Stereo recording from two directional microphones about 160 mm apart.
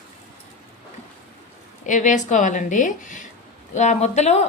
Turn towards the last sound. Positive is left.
turn(degrees=45)  # may be behind; listen again after turning